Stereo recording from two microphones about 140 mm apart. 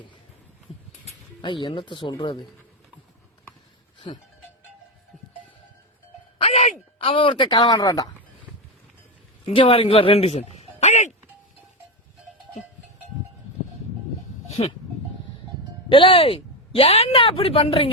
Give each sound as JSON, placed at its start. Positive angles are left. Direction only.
{"t": 1.4, "sound": "speech", "side_deg": 35}
{"t": 4.1, "sound": "speech", "side_deg": 40}
{"t": 6.4, "sound": "a sound", "side_deg": 45}
{"t": 9.6, "sound": "a man's voice", "side_deg": 40}
{"t": 14.6, "sound": "speech", "side_deg": 40}
{"t": 15.9, "sound": "speech", "side_deg": 40}